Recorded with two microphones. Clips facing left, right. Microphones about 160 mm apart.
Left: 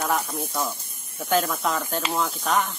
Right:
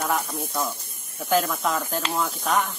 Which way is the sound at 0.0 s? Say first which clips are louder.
Left 1 dB; centre (ahead or behind).